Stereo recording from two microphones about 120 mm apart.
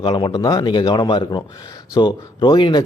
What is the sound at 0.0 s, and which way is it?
A man's voice, 35° left (ahead or behind).